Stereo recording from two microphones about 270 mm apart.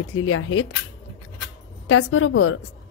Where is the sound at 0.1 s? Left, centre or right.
Left.